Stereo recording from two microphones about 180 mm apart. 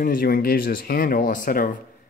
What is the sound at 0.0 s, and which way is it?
Speech, 50° left (ahead or behind).